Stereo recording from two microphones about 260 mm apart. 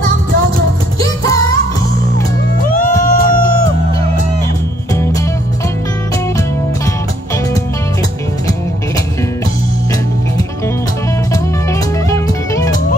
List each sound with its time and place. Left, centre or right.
2.7 s music: left
4.9 s music: centre
11.7 s music: centre